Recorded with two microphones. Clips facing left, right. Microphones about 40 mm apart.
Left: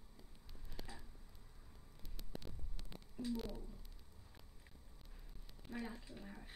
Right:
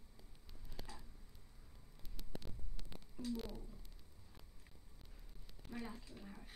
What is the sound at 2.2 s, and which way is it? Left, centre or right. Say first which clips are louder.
Hum: even; centre.